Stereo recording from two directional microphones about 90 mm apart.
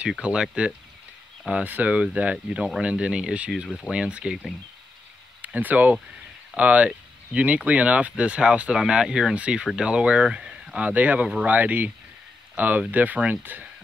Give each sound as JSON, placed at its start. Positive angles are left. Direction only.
{"t": 0.2, "sound": "speech", "side_deg": -10}
{"t": 5.4, "sound": "speech", "side_deg": -20}